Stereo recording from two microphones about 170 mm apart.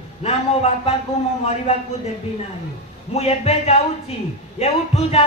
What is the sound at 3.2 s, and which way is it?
Music, 40° left (ahead or behind).